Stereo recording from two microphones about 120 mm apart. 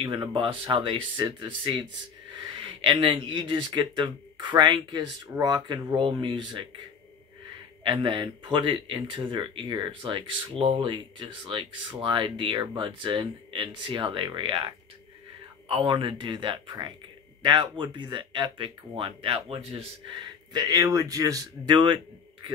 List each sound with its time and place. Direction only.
0.0 s speech: 45° right (ahead or behind)
7.8 s speech: 40° right (ahead or behind)
15.7 s speech: 45° right (ahead or behind)
20.5 s speech: 30° right (ahead or behind)